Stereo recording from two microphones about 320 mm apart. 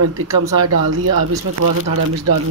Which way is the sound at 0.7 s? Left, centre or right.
Right.